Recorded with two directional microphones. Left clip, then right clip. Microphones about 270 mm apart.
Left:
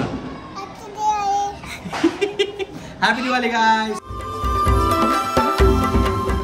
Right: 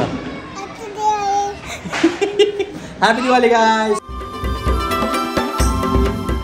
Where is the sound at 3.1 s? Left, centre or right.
Centre.